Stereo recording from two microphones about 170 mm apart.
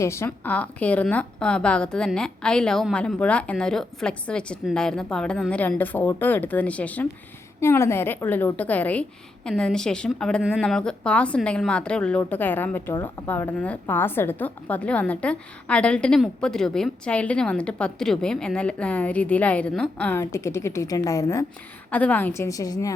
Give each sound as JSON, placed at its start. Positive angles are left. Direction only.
{"t": 0.0, "sound": "a woman's voice", "side_deg": 15}
{"t": 21.8, "sound": "a woman's voice", "side_deg": 10}